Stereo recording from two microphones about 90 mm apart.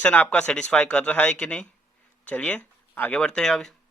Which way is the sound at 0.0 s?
15° left (ahead or behind).